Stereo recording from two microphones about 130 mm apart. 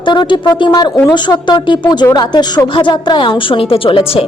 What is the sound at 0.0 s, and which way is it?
A woman's voice, 35° left (ahead or behind).